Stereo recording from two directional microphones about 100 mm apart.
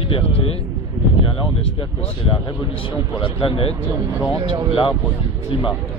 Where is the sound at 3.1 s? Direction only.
60° left (ahead or behind).